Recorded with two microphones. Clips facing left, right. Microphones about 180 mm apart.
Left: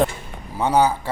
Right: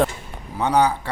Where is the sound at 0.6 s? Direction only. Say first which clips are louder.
Left 1 dB; 5° left (ahead or behind).